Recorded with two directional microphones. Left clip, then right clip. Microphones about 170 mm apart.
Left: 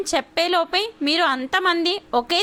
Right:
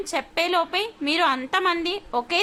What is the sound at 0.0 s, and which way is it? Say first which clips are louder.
Speech: left 3 dB; 30° left (ahead or behind).